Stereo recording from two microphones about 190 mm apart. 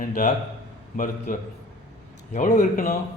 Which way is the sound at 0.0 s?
45° left (ahead or behind).